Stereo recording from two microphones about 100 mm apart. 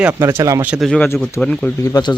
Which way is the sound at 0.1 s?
30° right (ahead or behind).